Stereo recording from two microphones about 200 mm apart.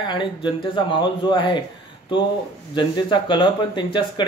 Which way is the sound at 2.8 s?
25° left (ahead or behind).